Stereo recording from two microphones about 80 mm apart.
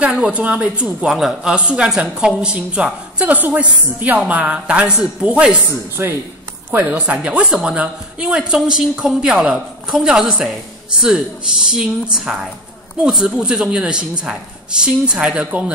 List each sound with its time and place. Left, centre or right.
0.0 s speech: centre